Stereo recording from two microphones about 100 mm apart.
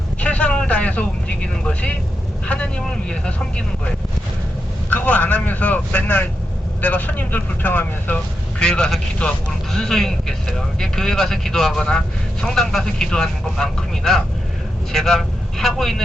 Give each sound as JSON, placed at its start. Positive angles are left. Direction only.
{"t": 0.2, "sound": "vehicle", "side_deg": 10}
{"t": 2.5, "sound": "speech", "side_deg": 10}